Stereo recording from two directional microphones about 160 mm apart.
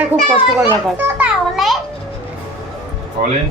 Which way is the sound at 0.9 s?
15° right (ahead or behind).